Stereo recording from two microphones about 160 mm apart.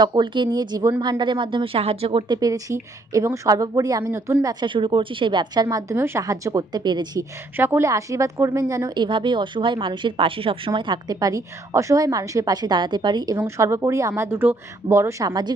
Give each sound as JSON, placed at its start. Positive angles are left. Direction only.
{"t": 0.0, "sound": "a woman's voice", "side_deg": -25}
{"t": 4.6, "sound": "speech", "side_deg": -30}
{"t": 5.6, "sound": "a woman's voice", "side_deg": -15}
{"t": 7.5, "sound": "a woman's voice", "side_deg": -15}